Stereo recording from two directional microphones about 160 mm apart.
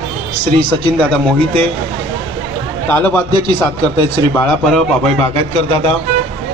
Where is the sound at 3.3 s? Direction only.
25° right (ahead or behind).